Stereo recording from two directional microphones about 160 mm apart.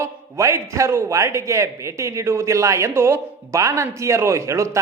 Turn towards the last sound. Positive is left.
turn(degrees=-20)  # may be behind; listen again after turning